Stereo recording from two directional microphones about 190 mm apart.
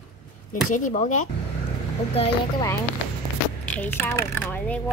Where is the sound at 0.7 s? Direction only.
40° left (ahead or behind).